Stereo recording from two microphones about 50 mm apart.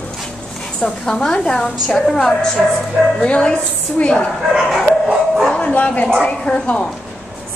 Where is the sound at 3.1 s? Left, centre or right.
Left.